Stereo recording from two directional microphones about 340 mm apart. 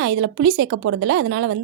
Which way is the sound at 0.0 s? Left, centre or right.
Right.